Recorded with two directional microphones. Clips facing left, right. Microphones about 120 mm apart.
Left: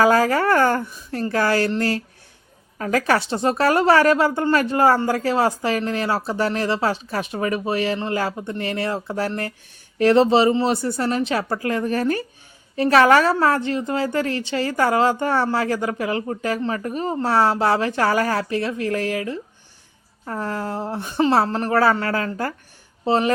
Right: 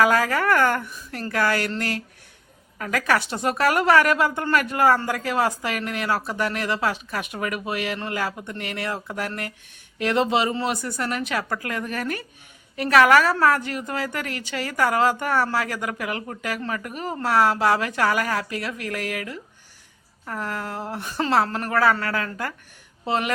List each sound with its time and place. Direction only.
0.0 s a woman's voice: 30° left (ahead or behind)
2.7 s a woman's voice: 30° left (ahead or behind)